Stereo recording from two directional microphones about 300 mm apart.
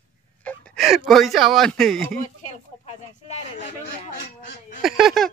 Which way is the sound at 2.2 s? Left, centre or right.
Left.